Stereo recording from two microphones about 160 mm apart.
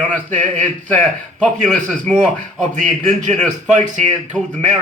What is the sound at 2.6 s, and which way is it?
Speech, 50° right (ahead or behind).